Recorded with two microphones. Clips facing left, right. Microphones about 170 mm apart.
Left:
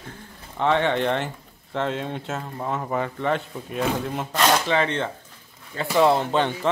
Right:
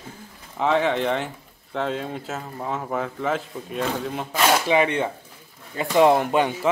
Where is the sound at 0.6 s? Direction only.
Centre (ahead or behind).